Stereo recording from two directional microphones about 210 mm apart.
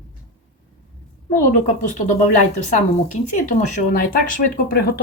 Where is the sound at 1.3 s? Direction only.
35° left (ahead or behind).